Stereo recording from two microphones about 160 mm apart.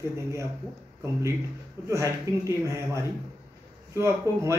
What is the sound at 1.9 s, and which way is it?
Speech, 20° right (ahead or behind).